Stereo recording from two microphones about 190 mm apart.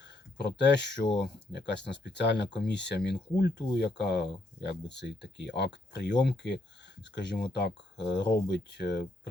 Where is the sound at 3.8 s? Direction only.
60° left (ahead or behind).